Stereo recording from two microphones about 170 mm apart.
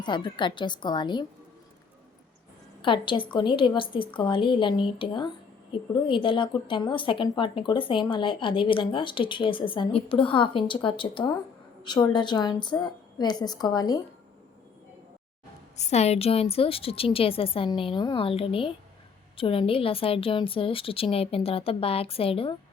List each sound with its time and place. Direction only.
0.0 s a woman's voice: 25° left (ahead or behind)
2.8 s a woman's voice: 30° left (ahead or behind)
15.8 s a woman's voice: 40° left (ahead or behind)